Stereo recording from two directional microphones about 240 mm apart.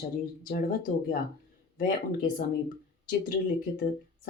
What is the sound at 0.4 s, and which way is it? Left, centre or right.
A woman's voice, left.